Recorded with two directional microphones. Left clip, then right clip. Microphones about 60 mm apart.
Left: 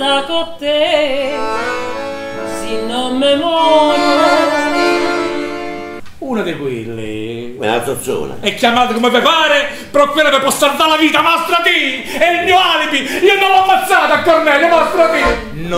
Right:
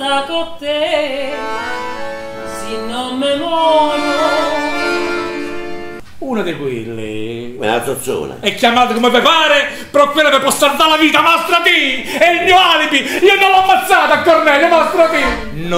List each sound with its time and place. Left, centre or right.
0.0 s music: left
1.4 s music: left
2.7 s music: left
7.6 s a man's voice: centre